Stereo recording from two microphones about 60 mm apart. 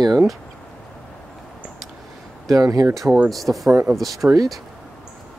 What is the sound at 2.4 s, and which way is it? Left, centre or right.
Speech, right.